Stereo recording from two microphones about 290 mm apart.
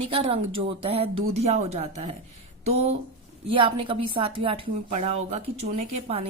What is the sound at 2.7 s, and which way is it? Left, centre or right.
Speech, right.